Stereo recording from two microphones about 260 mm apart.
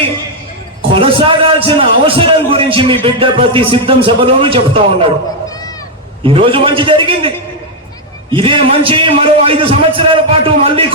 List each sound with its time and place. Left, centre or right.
0.9 s a man's voice: right
6.2 s a man's voice: right